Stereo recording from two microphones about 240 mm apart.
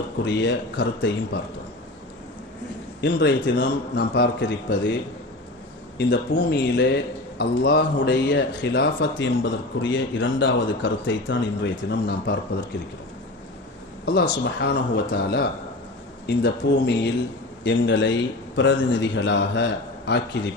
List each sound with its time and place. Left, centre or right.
0.3 s a man's voice: left
3.2 s a man's voice: left
6.0 s a man's voice: left
14.0 s a man's voice: left